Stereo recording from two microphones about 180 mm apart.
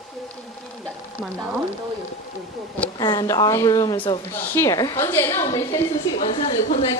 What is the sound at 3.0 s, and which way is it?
A woman's voice, 25° left (ahead or behind).